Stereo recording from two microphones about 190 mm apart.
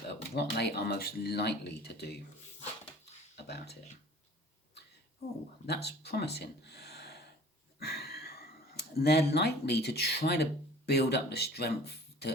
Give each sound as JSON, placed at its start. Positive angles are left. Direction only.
{"t": 0.1, "sound": "speech", "side_deg": 60}
{"t": 3.3, "sound": "speech", "side_deg": 60}
{"t": 5.6, "sound": "speech", "side_deg": 60}